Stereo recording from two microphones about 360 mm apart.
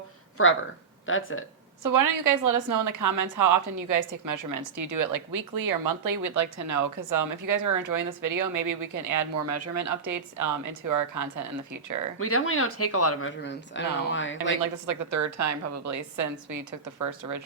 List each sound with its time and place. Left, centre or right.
0.4 s speech: left
1.8 s a woman's voice: right
12.2 s speech: left
13.4 s speech: left
14.6 s a woman's voice: right